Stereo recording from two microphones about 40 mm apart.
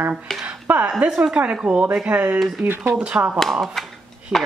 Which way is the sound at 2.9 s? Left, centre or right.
Right.